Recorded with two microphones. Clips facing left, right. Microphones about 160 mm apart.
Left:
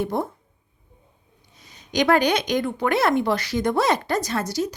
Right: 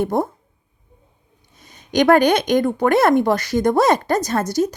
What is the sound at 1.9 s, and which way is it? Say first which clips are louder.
Speech: right 5 dB; 50° right (ahead or behind).